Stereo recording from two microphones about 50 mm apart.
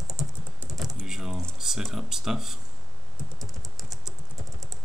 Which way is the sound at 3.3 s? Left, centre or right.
Centre.